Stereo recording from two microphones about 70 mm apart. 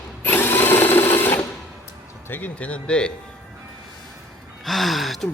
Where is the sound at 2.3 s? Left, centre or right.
Left.